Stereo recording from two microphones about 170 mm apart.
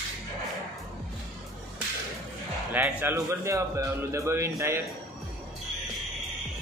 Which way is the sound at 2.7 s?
10° right (ahead or behind).